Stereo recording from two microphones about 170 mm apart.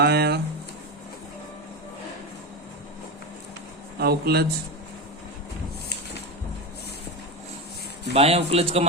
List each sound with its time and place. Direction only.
0.0 s speech: 70° right (ahead or behind)
4.0 s speech: 65° right (ahead or behind)
8.1 s speech: 35° right (ahead or behind)